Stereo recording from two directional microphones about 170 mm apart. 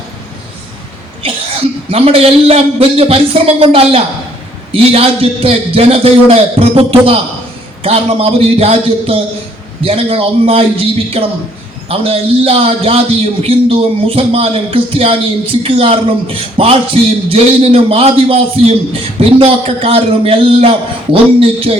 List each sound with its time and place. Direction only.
1.9 s a man's voice: 35° right (ahead or behind)